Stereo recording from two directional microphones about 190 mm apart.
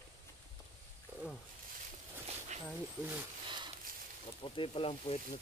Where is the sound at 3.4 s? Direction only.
25° right (ahead or behind).